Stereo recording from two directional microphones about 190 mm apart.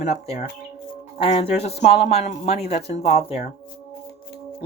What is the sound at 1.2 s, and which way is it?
Speech, 30° left (ahead or behind).